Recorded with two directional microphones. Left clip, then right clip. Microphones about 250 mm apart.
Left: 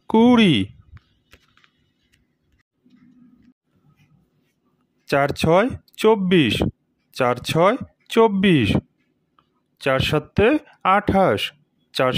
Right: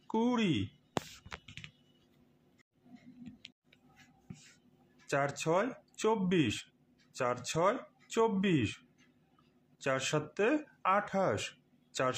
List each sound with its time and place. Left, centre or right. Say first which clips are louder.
0.1 s speech: left 17 dB; left
5.0 s speech: left 14 dB; left
9.8 s speech: left 13 dB; left